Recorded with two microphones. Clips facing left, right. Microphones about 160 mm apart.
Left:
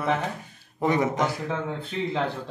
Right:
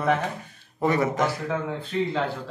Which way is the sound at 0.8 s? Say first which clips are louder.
Right 1 dB; 15° left (ahead or behind).